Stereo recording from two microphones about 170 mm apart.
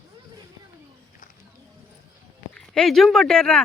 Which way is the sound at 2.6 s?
5° left (ahead or behind).